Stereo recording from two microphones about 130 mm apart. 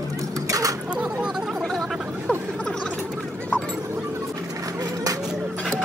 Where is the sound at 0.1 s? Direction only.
25° right (ahead or behind).